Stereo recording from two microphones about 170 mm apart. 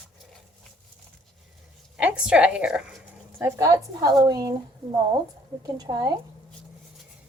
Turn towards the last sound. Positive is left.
turn(degrees=-25)  # may be behind; listen again after turning